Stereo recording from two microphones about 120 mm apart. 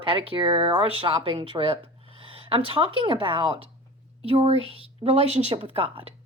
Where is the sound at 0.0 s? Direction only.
45° right (ahead or behind).